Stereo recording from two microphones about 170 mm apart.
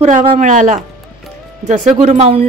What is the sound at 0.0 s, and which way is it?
Speech, 35° right (ahead or behind).